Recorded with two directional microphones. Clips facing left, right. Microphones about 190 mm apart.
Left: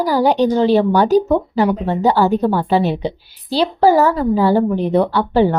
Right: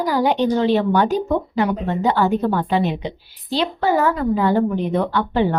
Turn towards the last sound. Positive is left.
turn(degrees=35)  # may be behind; listen again after turning